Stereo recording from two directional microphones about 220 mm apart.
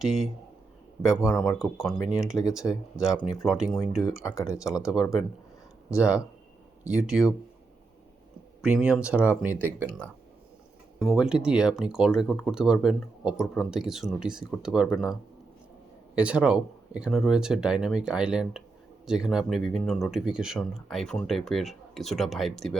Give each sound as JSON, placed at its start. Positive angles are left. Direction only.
{"t": 0.0, "sound": "speech", "side_deg": 0}
{"t": 1.3, "sound": "speech", "side_deg": 5}
{"t": 2.3, "sound": "speech", "side_deg": 15}
{"t": 3.4, "sound": "speech", "side_deg": 0}
{"t": 4.8, "sound": "speech", "side_deg": 15}
{"t": 6.9, "sound": "speech", "side_deg": 0}
{"t": 8.6, "sound": "speech", "side_deg": -5}
{"t": 16.1, "sound": "speech", "side_deg": -5}